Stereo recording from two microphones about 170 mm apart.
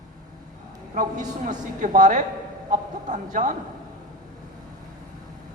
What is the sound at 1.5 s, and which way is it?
A man's voice, 45° right (ahead or behind).